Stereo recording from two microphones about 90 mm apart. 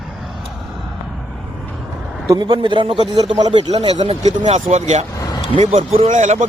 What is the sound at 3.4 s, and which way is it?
Speech, 60° right (ahead or behind).